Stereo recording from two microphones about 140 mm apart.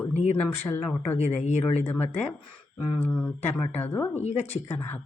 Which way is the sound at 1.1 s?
50° left (ahead or behind).